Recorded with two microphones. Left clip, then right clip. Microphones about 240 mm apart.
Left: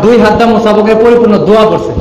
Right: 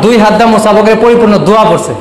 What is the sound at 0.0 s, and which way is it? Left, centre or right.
A man's voice, right.